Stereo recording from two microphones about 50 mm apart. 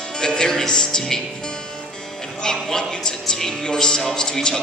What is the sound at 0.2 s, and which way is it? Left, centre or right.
Speech, centre.